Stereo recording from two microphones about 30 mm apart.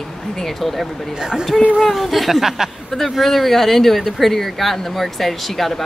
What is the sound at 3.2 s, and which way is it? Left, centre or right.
Speech, centre.